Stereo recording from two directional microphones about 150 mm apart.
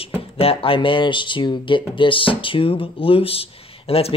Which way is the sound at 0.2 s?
40° left (ahead or behind).